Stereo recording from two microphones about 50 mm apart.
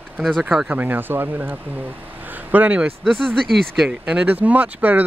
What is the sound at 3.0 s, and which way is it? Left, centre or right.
Speech, centre.